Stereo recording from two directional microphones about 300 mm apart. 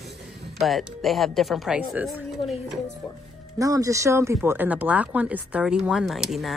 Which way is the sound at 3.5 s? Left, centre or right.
Centre.